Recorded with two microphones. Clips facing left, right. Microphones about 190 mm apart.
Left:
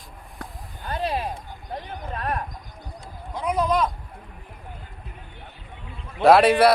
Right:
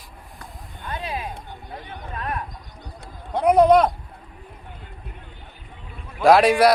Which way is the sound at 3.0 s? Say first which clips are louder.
Right 9 dB; 65° right (ahead or behind).